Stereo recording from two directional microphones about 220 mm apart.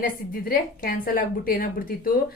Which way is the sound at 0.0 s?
40° left (ahead or behind).